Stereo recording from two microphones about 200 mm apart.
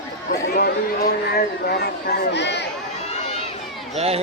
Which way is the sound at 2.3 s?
60° left (ahead or behind).